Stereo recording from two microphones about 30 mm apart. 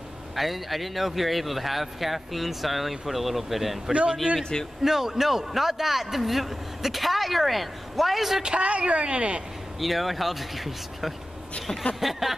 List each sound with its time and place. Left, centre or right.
0.4 s speech: centre
4.2 s speech: right
4.8 s a man's voice: centre
8.4 s speech: right
8.6 s speech: right
9.8 s speech: centre